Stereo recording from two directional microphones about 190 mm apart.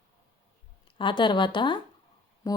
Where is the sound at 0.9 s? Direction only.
25° left (ahead or behind).